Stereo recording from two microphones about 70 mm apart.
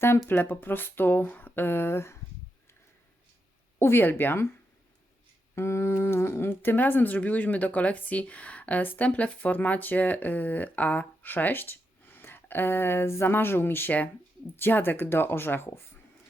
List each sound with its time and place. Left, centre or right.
0.3 s speech: left
3.8 s speech: left
5.5 s speech: left